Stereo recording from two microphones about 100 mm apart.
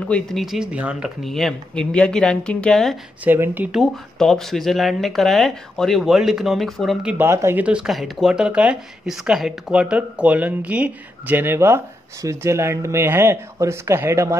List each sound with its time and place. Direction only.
0.1 s speech: centre (ahead or behind)
1.2 s speech: centre (ahead or behind)
3.3 s speech: 20° right (ahead or behind)
3.7 s speech: centre (ahead or behind)
7.2 s speech: 25° right (ahead or behind)
7.5 s speech: 10° right (ahead or behind); by 14.3 s 30° right (ahead or behind)